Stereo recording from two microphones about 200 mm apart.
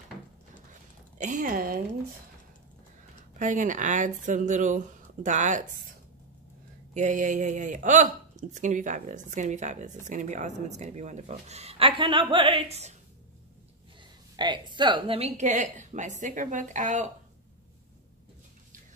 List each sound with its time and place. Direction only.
1.1 s a sound: 40° right (ahead or behind)
3.3 s speech: 40° right (ahead or behind)
6.9 s speech: 40° right (ahead or behind)
14.3 s speech: 20° right (ahead or behind); by 17.1 s 40° right (ahead or behind)